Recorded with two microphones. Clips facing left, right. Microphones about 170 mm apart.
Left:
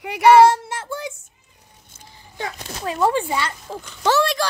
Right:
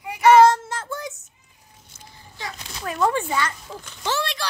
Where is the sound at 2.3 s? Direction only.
60° left (ahead or behind).